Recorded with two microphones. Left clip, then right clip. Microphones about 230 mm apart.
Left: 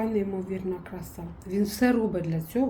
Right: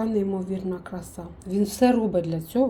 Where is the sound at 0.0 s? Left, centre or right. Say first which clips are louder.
Right 2 dB; centre.